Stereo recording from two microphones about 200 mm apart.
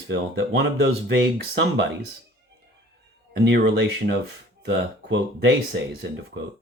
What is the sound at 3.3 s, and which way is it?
Speech, 60° right (ahead or behind).